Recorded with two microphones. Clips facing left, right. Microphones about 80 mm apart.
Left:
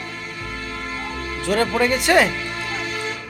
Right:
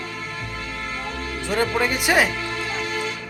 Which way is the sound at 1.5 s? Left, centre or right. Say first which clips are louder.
Left 3 dB; centre.